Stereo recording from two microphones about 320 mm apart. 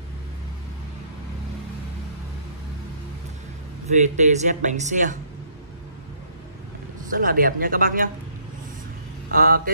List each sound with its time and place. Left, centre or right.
4.2 s speech: right
7.0 s speech: right
9.3 s speech: right